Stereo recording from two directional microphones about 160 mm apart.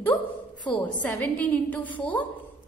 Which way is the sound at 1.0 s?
10° left (ahead or behind).